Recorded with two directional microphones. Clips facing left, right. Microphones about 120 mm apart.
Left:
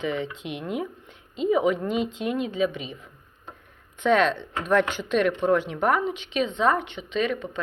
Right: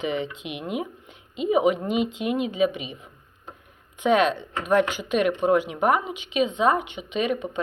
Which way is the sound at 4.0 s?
10° right (ahead or behind).